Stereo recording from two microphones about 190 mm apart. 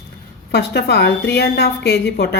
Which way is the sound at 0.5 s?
60° left (ahead or behind).